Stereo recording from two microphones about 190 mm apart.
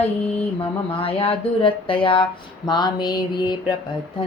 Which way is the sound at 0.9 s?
30° left (ahead or behind).